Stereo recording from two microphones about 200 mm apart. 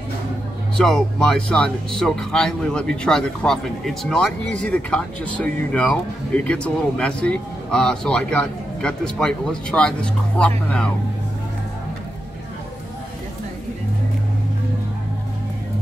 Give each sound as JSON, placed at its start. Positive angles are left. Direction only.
{"t": 0.7, "sound": "speech", "side_deg": 5}